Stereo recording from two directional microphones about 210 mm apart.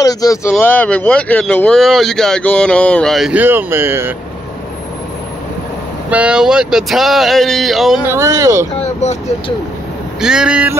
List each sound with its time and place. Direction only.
0.0 s speech: 15° left (ahead or behind); by 4.1 s 10° right (ahead or behind)
6.0 s speech: 5° right (ahead or behind)
8.1 s speech: 15° right (ahead or behind)
9.0 s speech: 35° left (ahead or behind)
10.2 s speech: 5° right (ahead or behind)